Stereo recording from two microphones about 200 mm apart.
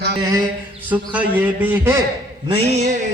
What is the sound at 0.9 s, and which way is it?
A man's voice, 10° right (ahead or behind).